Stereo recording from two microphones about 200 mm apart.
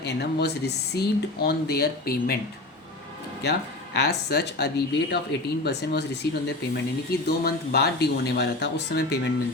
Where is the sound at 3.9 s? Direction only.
55° left (ahead or behind).